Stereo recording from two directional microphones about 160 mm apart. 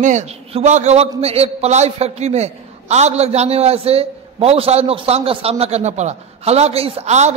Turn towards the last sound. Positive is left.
turn(degrees=-45)  # may be behind; listen again after turning